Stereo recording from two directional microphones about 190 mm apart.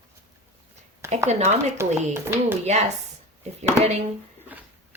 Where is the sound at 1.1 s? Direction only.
35° right (ahead or behind).